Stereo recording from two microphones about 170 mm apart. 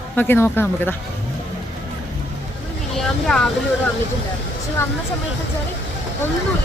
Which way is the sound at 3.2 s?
5° left (ahead or behind).